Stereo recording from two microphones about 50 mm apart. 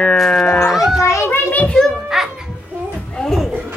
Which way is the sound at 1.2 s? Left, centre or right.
Left.